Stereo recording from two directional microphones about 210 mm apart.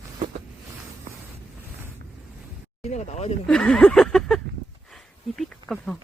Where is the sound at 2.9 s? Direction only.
35° left (ahead or behind).